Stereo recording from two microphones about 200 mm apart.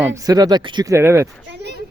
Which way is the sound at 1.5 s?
55° right (ahead or behind).